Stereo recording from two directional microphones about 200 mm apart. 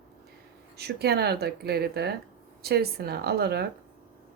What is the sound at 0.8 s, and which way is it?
Speech, 55° right (ahead or behind).